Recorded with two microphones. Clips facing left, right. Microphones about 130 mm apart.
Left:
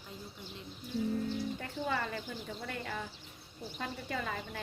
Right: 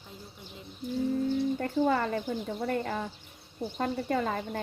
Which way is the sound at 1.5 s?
45° right (ahead or behind).